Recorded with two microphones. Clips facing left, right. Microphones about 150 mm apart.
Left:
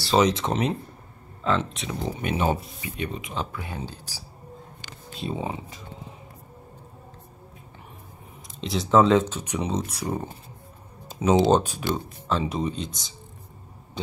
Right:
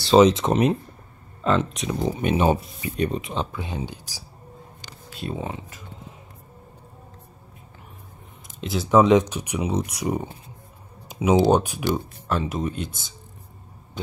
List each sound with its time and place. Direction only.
0.0 s speech: 25° right (ahead or behind)
2.8 s speech: 35° right (ahead or behind); by 4.2 s 15° right (ahead or behind)
5.4 s speech: centre (ahead or behind)
8.5 s speech: 5° right (ahead or behind)
8.9 s speech: 15° right (ahead or behind)